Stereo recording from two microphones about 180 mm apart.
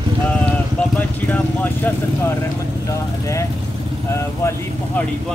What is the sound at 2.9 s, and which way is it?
Speech, 15° left (ahead or behind).